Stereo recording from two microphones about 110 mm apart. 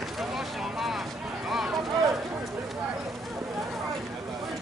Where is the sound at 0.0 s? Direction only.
Centre (ahead or behind).